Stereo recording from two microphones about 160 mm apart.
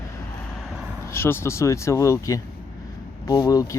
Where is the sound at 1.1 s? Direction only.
15° left (ahead or behind).